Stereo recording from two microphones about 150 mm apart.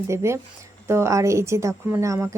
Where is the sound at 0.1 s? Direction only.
20° right (ahead or behind).